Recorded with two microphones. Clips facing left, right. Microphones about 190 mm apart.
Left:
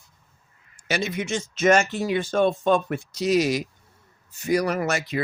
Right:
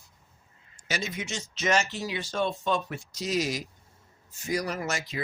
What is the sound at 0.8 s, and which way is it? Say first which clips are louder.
Speech: left 7 dB; 65° left (ahead or behind).